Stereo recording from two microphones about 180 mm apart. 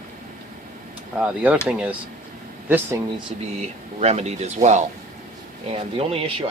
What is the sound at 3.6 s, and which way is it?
Speech, 35° right (ahead or behind).